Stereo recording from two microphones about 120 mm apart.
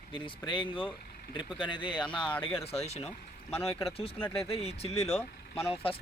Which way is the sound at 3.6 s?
25° left (ahead or behind).